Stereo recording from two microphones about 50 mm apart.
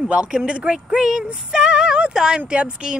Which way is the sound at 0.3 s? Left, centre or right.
Centre.